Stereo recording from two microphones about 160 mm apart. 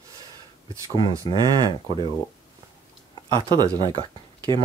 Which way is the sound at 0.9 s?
30° right (ahead or behind).